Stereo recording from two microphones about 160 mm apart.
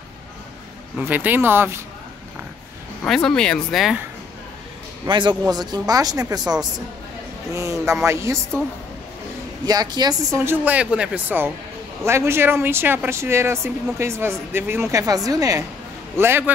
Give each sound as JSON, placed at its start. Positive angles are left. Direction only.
{"t": 0.9, "sound": "speech", "side_deg": -10}
{"t": 3.0, "sound": "speech", "side_deg": 5}
{"t": 5.0, "sound": "speech", "side_deg": -30}
{"t": 7.5, "sound": "speech", "side_deg": -20}
{"t": 9.7, "sound": "speech", "side_deg": -25}
{"t": 10.4, "sound": "speech", "side_deg": -10}